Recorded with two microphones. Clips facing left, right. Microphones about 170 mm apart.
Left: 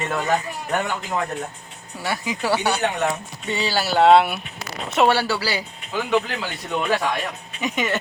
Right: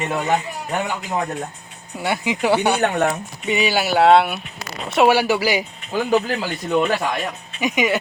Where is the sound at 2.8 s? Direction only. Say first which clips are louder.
Right 4 dB; 50° right (ahead or behind).